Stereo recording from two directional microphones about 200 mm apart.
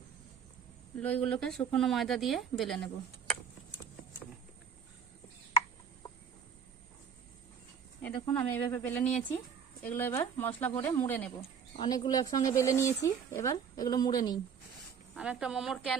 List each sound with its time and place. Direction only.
0.9 s a woman's voice: 5° left (ahead or behind)
8.0 s speech: 10° left (ahead or behind)
11.8 s speech: 20° left (ahead or behind)
15.1 s a woman's voice: 5° right (ahead or behind)